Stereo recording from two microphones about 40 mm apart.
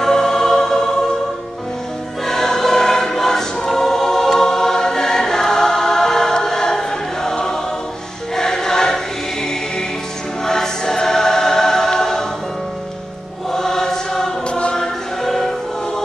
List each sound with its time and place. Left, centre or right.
0.0 s music: centre
2.2 s choir: centre
13.5 s choir: centre
14.5 s choir: left
15.2 s music: centre